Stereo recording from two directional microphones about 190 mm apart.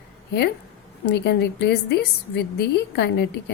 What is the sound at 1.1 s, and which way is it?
A woman's voice, 60° left (ahead or behind).